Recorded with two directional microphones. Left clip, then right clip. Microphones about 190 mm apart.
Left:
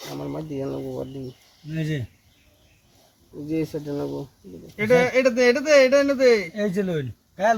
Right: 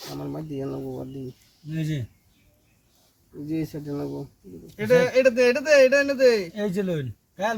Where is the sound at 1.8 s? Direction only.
25° right (ahead or behind).